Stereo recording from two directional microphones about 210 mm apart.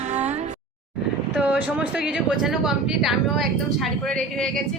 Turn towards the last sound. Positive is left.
turn(degrees=0)  # may be behind; listen again after turning